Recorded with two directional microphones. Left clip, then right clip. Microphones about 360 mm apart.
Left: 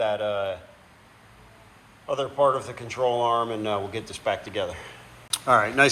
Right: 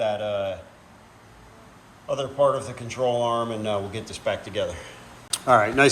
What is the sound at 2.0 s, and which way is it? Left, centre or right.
Speech, centre.